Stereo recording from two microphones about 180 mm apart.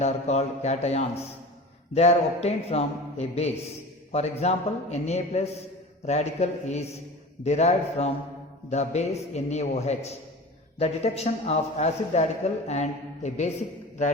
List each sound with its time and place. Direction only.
0.0 s speech: 40° left (ahead or behind)